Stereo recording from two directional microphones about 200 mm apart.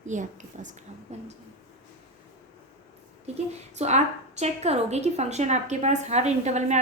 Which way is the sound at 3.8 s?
35° right (ahead or behind).